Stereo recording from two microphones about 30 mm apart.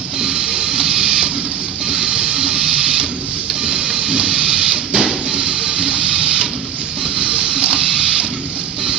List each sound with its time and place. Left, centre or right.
0.2 s printer: right
1.9 s music: right
3.6 s printer: right
4.4 s a sound: right
5.4 s music: right